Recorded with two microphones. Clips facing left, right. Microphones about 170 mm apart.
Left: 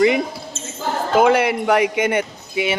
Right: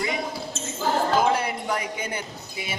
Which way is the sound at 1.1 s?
75° left (ahead or behind).